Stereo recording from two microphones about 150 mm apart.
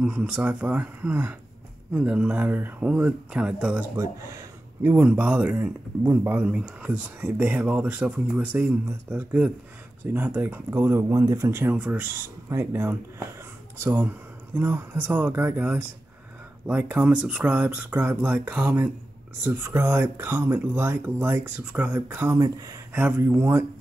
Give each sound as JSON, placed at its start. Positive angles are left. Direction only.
{"t": 0.0, "sound": "speech", "side_deg": -5}
{"t": 3.9, "sound": "speech", "side_deg": -20}
{"t": 4.9, "sound": "speech", "side_deg": -10}
{"t": 22.9, "sound": "speech", "side_deg": -10}